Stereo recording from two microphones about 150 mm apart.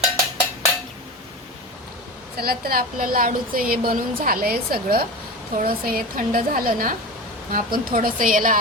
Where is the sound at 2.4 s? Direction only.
90° right; by 8.6 s 65° right (ahead or behind).